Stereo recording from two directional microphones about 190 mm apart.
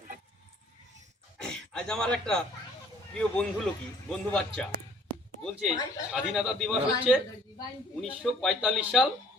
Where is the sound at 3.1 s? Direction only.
5° left (ahead or behind).